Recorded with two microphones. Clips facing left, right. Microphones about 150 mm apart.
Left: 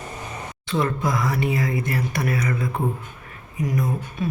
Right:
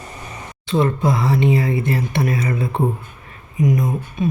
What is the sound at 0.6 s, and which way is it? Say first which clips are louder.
Speech: right 5 dB; 25° right (ahead or behind).